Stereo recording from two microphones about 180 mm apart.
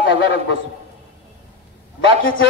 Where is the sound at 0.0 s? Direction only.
85° left.